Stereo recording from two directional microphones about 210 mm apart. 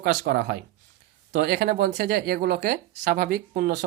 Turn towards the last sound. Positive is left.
turn(degrees=-40)  # may be behind; listen again after turning